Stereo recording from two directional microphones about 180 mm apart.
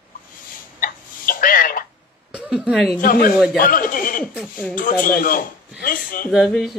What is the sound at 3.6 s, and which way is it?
Speech, 50° left (ahead or behind).